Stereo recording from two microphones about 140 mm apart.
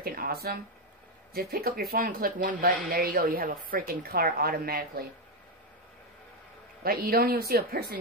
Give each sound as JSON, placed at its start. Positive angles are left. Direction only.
{"t": 0.0, "sound": "a sound", "side_deg": -90}
{"t": 1.3, "sound": "speech", "side_deg": -90}
{"t": 6.8, "sound": "speech", "side_deg": -90}